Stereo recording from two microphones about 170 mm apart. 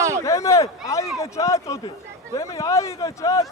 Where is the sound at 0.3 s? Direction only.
20° left (ahead or behind).